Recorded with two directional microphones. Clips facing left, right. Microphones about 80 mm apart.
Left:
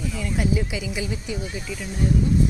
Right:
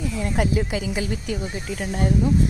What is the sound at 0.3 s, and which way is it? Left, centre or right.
A woman's voice, right.